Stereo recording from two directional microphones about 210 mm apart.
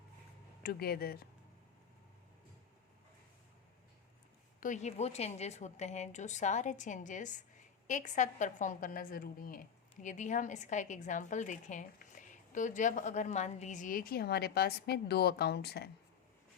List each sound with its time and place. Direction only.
0.6 s speech: 45° left (ahead or behind)
4.6 s a woman's voice: 35° left (ahead or behind)